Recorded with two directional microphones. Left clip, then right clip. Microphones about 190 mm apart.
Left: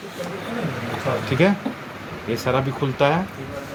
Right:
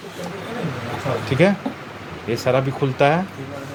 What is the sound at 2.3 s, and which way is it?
Speech, 45° right (ahead or behind).